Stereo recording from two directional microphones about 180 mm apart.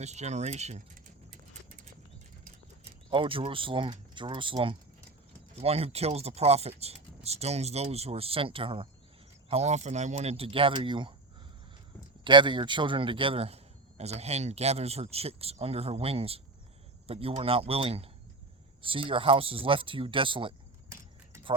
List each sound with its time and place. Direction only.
0.0 s speech: 40° right (ahead or behind)
3.1 s speech: 30° right (ahead or behind)
12.2 s speech: 25° right (ahead or behind)